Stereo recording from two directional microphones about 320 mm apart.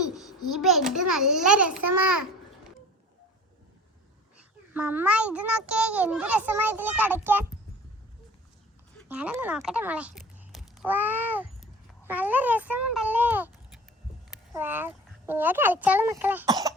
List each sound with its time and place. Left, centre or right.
0.4 s a child's voice: centre
1.6 s a child's voice: right
4.4 s a child's voice: centre
9.0 s speech: centre
14.5 s a child's voice: centre